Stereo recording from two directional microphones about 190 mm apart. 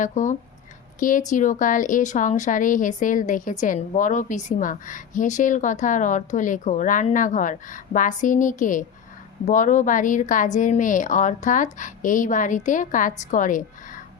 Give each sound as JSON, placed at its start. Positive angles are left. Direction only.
{"t": 0.0, "sound": "a woman's voice", "side_deg": 40}